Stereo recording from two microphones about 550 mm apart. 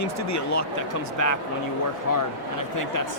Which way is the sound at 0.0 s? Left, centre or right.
Left.